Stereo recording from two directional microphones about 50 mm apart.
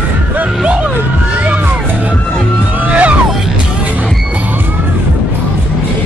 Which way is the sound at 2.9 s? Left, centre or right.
Right.